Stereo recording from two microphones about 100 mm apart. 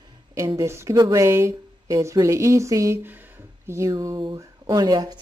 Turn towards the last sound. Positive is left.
turn(degrees=-45)  # may be behind; listen again after turning